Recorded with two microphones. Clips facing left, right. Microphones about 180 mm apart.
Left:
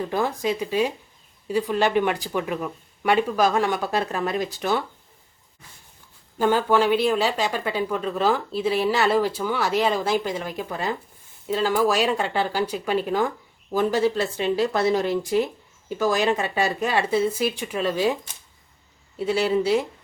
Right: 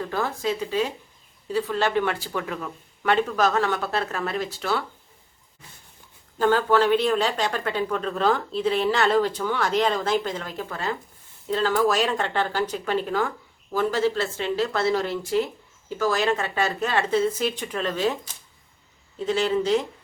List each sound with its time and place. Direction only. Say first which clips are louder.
0.0 s speech: left 2 dB; 15° left (ahead or behind)
6.4 s speech: even; 10° left (ahead or behind)
19.2 s speech: left 1 dB; 10° left (ahead or behind)